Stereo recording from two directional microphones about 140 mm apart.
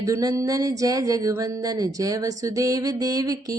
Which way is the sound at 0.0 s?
25° right (ahead or behind).